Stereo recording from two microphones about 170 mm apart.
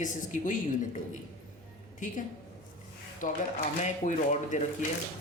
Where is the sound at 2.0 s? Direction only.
45° left (ahead or behind).